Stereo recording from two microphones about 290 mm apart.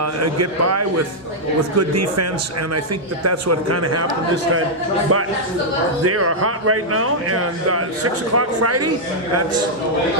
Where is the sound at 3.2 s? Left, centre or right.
Right.